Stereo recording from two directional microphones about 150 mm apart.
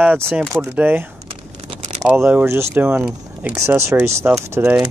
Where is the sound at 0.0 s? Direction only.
15° right (ahead or behind).